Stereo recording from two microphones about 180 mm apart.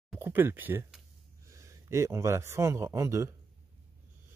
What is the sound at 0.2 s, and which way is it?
A man's voice, 10° right (ahead or behind).